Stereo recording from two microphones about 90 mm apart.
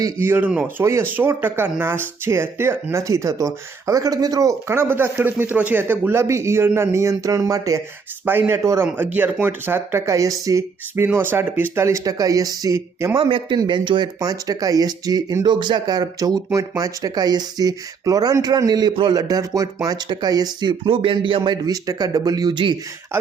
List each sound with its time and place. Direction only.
0.2 s speech: 25° right (ahead or behind)
0.8 s speech: 30° right (ahead or behind)
4.7 s speech: 25° right (ahead or behind)
8.2 s speech: 25° right (ahead or behind); by 13.1 s 40° right (ahead or behind)
13.1 s a man's voice: 70° right (ahead or behind); by 20.7 s 50° right (ahead or behind)
20.8 s speech: 85° right; by 22.5 s 45° right (ahead or behind)
22.5 s speech: 60° right (ahead or behind)